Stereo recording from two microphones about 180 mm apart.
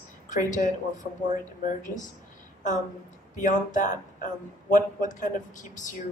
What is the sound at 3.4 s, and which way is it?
Speech, 45° left (ahead or behind).